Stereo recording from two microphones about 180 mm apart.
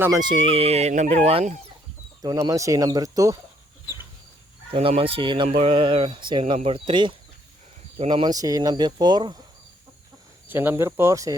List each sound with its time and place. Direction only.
0.0 s speech: 20° right (ahead or behind)
2.2 s speech: 20° right (ahead or behind)
4.7 s speech: 30° right (ahead or behind)
10.5 s speech: 10° right (ahead or behind)